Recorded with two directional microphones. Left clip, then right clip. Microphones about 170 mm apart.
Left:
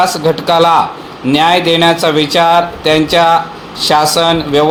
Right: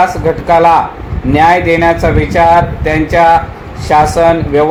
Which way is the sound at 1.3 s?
25° left (ahead or behind).